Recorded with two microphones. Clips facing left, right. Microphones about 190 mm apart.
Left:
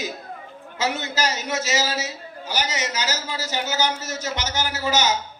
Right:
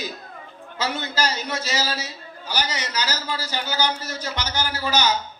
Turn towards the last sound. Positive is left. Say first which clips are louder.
# left 1 dB
turn(degrees=20)  # may be behind; listen again after turning